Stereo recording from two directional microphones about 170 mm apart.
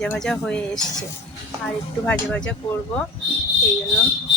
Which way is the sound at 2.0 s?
5° left (ahead or behind).